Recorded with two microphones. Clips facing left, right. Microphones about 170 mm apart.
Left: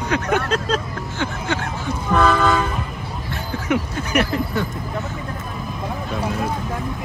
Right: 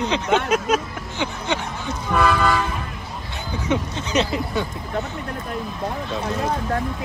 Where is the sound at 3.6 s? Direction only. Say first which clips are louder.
Left 1 dB; 20° right (ahead or behind).